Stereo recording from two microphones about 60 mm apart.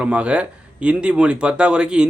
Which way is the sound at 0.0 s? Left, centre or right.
Centre.